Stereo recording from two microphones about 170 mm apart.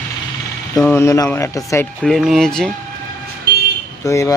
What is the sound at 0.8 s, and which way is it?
A man's voice, 15° left (ahead or behind).